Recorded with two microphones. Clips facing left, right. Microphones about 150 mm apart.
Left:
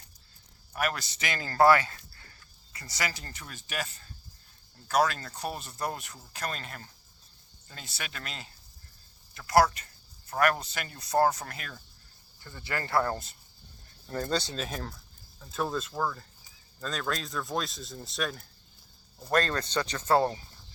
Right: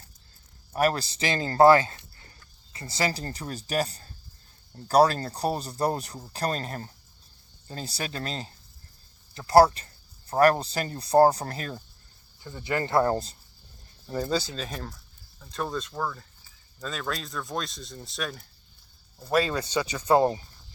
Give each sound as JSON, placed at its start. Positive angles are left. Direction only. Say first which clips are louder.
{"t": 0.7, "sound": "speech", "louder": "right 7 dB", "side_deg": -35}
{"t": 12.4, "sound": "speech", "louder": "right 7 dB", "side_deg": -15}
{"t": 14.1, "sound": "speech", "louder": "right 3 dB", "side_deg": -10}